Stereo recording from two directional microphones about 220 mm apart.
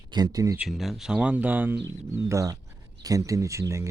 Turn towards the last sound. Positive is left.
turn(degrees=-15)  # may be behind; listen again after turning